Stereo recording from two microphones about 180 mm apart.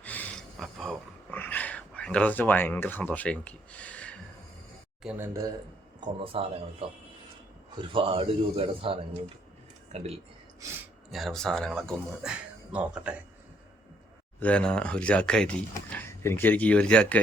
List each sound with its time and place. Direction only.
0.0 s a sound: 10° left (ahead or behind)
1.4 s speech: 10° left (ahead or behind)
5.0 s speech: 10° right (ahead or behind)
6.0 s speech: 30° right (ahead or behind)
11.1 s speech: centre (ahead or behind)
14.3 s speech: 5° left (ahead or behind)